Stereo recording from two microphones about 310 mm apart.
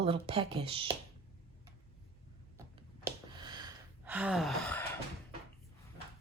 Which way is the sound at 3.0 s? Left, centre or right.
Centre.